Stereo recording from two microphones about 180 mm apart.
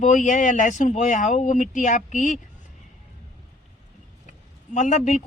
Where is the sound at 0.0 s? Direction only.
45° left (ahead or behind).